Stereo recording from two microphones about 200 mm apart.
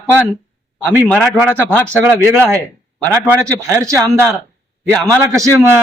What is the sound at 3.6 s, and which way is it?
A man's voice, 15° right (ahead or behind).